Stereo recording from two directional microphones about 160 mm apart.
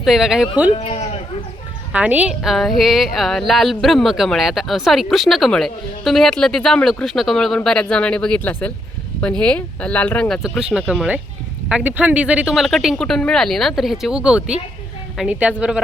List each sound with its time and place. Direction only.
0.0 s a woman's voice: centre (ahead or behind)
0.8 s speech: 40° left (ahead or behind)
1.9 s a woman's voice: 10° right (ahead or behind)